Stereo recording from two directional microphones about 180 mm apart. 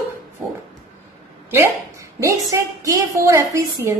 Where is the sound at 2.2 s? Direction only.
15° right (ahead or behind).